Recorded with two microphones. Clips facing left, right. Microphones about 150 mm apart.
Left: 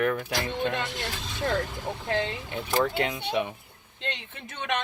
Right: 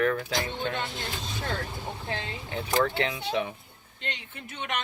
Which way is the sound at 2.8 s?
15° left (ahead or behind).